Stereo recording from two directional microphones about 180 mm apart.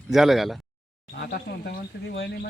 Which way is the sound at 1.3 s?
60° left (ahead or behind).